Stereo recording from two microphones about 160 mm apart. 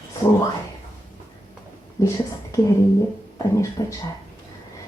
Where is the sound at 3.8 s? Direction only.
25° left (ahead or behind).